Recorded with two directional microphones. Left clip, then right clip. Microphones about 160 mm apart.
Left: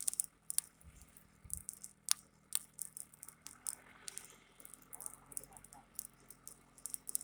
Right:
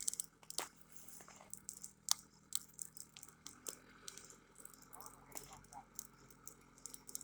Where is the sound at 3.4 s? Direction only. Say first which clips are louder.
Left 2 dB; 5° left (ahead or behind).